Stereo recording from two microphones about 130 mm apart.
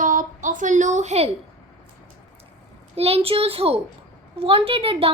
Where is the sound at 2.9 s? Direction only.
50° right (ahead or behind).